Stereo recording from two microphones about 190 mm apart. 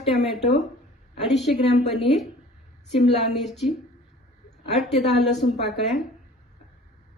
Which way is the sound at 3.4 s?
Centre (ahead or behind).